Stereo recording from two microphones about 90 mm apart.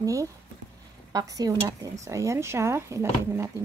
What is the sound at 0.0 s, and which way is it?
Speech, 40° right (ahead or behind).